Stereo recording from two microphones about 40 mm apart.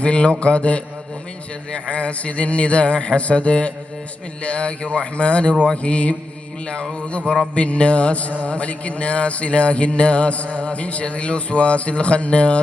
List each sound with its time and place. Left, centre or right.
0.0 s speech: left